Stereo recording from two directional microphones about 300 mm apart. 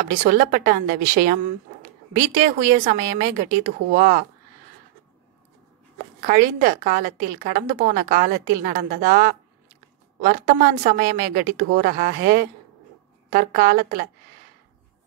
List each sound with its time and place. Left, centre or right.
0.1 s a woman's voice: right
6.2 s a woman's voice: right